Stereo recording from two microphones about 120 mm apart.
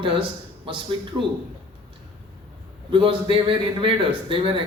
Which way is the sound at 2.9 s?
45° right (ahead or behind).